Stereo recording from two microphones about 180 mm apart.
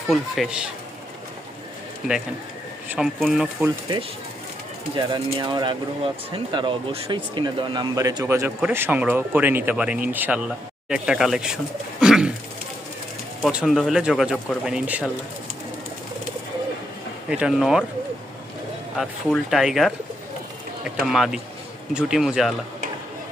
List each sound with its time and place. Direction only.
0.1 s speech: 5° right (ahead or behind)
2.0 s speech: 5° right (ahead or behind)
5.1 s speech: 25° right (ahead or behind); by 12.3 s 5° right (ahead or behind)
13.4 s speech: 5° right (ahead or behind)
17.2 s speech: 5° right (ahead or behind)
18.9 s speech: centre (ahead or behind)
21.0 s speech: centre (ahead or behind)